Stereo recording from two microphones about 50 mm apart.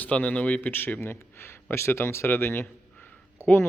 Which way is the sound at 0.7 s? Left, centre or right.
Left.